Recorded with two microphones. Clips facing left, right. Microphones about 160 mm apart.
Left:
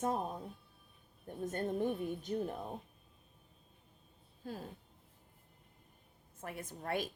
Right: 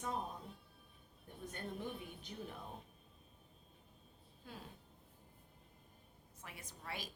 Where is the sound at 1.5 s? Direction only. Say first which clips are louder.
Left 10 dB; 50° left (ahead or behind).